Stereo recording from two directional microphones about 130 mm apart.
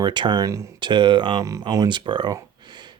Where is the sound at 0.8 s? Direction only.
35° right (ahead or behind).